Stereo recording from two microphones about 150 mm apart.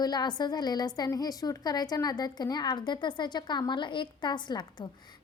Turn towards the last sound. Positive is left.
turn(degrees=30)  # may be behind; listen again after turning